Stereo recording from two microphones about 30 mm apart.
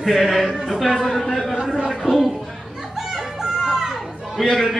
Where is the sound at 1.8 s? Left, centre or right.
Centre.